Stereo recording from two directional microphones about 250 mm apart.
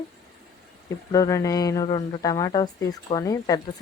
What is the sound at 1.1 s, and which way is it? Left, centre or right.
Speech, centre.